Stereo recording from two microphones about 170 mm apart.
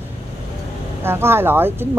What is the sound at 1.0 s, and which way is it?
Speech, 15° right (ahead or behind).